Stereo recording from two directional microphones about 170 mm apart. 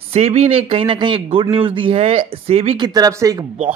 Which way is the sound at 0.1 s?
40° right (ahead or behind).